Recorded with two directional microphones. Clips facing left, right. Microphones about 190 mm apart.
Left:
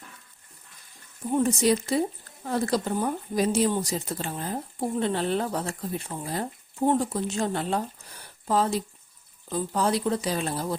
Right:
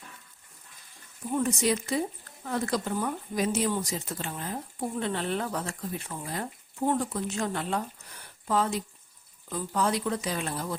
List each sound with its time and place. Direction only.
1.3 s speech: 30° left (ahead or behind)